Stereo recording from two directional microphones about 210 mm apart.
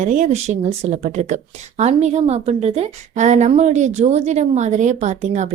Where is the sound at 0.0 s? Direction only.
35° right (ahead or behind).